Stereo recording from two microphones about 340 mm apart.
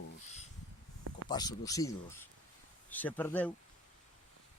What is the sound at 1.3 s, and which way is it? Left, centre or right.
Speech, centre.